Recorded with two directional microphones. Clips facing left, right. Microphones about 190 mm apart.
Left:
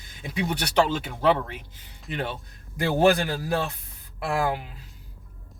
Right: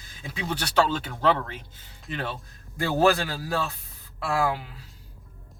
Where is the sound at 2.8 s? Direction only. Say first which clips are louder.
Left 2 dB; 20° left (ahead or behind).